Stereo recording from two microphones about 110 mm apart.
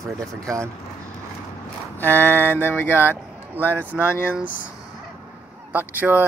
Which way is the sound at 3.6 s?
15° right (ahead or behind).